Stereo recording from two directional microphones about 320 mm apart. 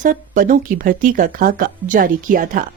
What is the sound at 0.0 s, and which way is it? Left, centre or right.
A woman's voice, right.